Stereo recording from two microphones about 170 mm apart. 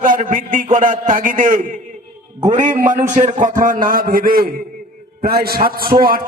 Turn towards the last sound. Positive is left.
turn(degrees=-60)  # may be behind; listen again after turning